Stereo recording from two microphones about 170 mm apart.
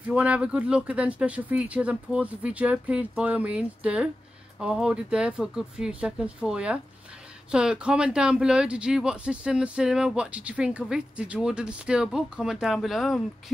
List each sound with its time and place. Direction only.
0.0 s speech: 10° right (ahead or behind)